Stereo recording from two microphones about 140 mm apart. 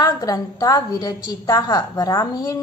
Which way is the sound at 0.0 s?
25° left (ahead or behind).